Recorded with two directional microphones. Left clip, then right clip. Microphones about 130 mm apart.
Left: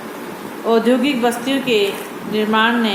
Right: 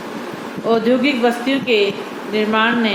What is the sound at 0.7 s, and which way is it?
A woman's voice, 40° left (ahead or behind).